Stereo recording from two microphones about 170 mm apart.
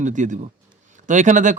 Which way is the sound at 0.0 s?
45° right (ahead or behind).